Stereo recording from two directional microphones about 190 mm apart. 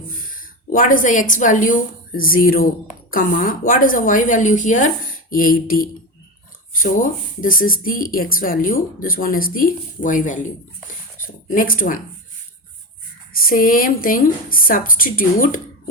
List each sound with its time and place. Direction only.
0.3 s a woman's voice: 45° left (ahead or behind)
6.9 s speech: 45° left (ahead or behind)
11.5 s speech: 50° left (ahead or behind)
13.3 s speech: 50° left (ahead or behind)